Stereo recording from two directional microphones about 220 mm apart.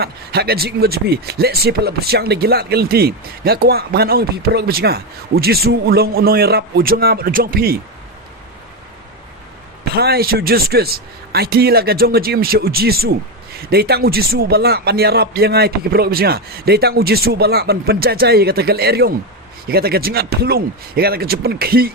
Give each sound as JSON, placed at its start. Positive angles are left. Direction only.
{"t": 0.0, "sound": "speech", "side_deg": -45}
{"t": 9.9, "sound": "speech", "side_deg": -45}